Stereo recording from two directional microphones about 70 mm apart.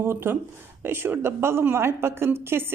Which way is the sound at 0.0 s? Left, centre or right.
Right.